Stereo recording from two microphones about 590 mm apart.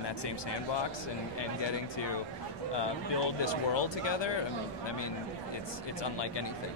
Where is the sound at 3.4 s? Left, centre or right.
Left.